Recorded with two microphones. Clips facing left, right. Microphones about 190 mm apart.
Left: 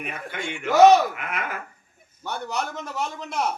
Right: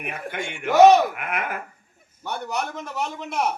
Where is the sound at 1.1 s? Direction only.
55° right (ahead or behind).